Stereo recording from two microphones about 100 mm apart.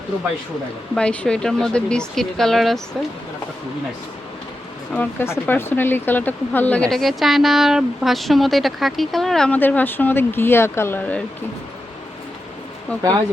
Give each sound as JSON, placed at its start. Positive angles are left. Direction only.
{"t": 0.9, "sound": "speech", "side_deg": 10}
{"t": 4.9, "sound": "speech", "side_deg": 20}
{"t": 6.9, "sound": "speech", "side_deg": 0}
{"t": 9.5, "sound": "speech", "side_deg": 15}
{"t": 12.9, "sound": "speech", "side_deg": 15}